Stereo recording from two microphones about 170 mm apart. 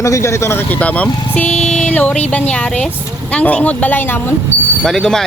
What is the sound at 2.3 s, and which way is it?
Speech, 10° left (ahead or behind).